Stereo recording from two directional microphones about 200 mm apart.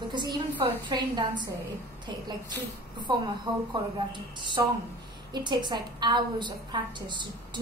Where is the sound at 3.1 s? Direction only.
20° right (ahead or behind).